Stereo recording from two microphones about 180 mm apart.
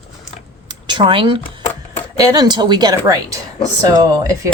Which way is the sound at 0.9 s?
30° right (ahead or behind).